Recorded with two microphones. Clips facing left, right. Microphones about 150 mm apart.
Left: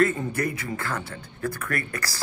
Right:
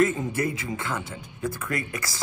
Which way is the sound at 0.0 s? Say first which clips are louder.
Even; 20° right (ahead or behind).